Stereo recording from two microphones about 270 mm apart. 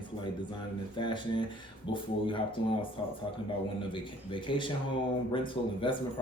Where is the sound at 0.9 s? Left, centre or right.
Centre.